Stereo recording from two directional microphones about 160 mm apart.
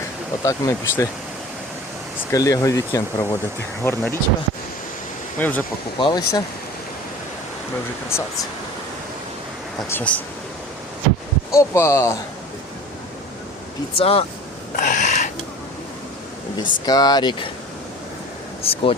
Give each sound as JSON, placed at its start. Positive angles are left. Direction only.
{"t": 0.4, "sound": "speech", "side_deg": 20}
{"t": 2.3, "sound": "speech", "side_deg": 20}
{"t": 5.4, "sound": "speech", "side_deg": 10}
{"t": 6.0, "sound": "speech", "side_deg": 25}
{"t": 9.9, "sound": "speech", "side_deg": 10}
{"t": 11.5, "sound": "speech", "side_deg": 20}
{"t": 14.0, "sound": "speech", "side_deg": 35}
{"t": 14.8, "sound": "a sound", "side_deg": 50}
{"t": 16.6, "sound": "speech", "side_deg": 25}
{"t": 18.6, "sound": "speech", "side_deg": 35}